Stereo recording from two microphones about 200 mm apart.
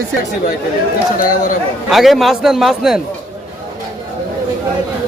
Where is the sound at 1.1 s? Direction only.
45° left (ahead or behind).